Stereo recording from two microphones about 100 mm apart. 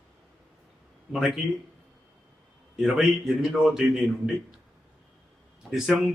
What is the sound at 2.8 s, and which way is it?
A man's voice, 5° right (ahead or behind).